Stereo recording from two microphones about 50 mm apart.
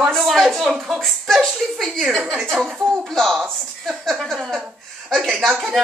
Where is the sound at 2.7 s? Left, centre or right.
Centre.